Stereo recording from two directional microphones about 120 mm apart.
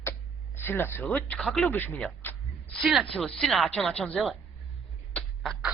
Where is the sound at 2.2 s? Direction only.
15° left (ahead or behind).